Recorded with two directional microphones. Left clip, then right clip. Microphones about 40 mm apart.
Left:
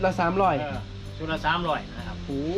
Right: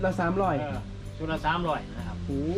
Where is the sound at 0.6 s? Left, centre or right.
Right.